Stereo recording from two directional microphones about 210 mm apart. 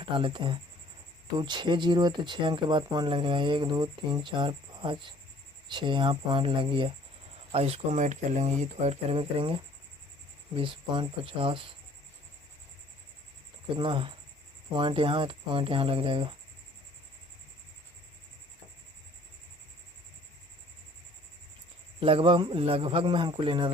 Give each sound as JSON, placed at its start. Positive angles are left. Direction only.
{"t": 0.1, "sound": "speech", "side_deg": -25}
{"t": 13.7, "sound": "speech", "side_deg": -25}
{"t": 22.0, "sound": "speech", "side_deg": -25}